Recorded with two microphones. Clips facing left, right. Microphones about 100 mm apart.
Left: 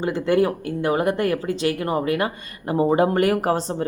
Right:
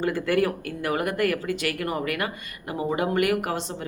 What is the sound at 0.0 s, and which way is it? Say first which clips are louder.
Speech: left 4 dB; 25° left (ahead or behind).